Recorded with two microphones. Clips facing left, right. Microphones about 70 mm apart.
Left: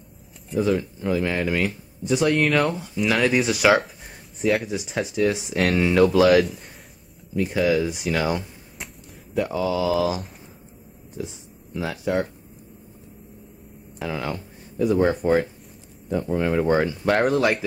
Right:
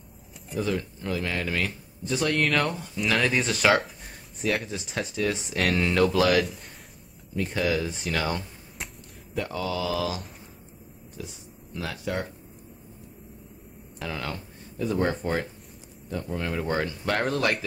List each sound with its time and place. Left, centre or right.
0.6 s speech: centre
11.8 s speech: centre
13.9 s speech: centre